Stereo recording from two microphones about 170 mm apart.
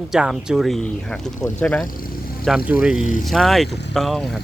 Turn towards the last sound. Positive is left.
turn(degrees=0)  # may be behind; listen again after turning